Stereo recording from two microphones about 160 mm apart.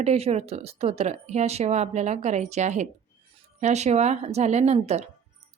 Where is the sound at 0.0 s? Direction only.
40° right (ahead or behind).